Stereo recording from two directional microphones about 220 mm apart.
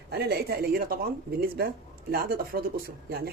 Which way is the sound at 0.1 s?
45° right (ahead or behind).